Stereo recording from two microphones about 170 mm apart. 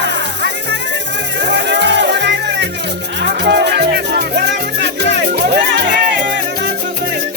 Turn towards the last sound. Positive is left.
turn(degrees=-70)  # may be behind; listen again after turning